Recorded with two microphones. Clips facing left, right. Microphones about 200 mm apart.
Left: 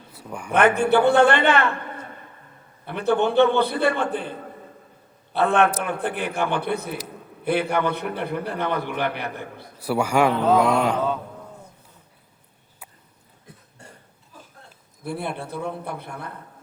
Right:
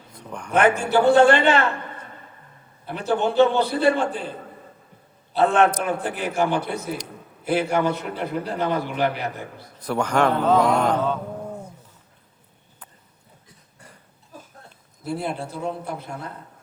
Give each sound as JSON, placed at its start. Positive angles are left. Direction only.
{"t": 0.1, "sound": "a sound", "side_deg": 5}
{"t": 0.5, "sound": "a man's voice", "side_deg": 60}
{"t": 2.8, "sound": "a man's voice", "side_deg": 60}
{"t": 9.7, "sound": "a man's voice", "side_deg": 10}
{"t": 15.0, "sound": "a man's voice", "side_deg": 55}